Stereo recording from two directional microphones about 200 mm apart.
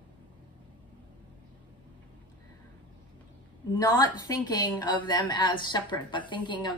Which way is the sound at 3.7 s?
20° left (ahead or behind).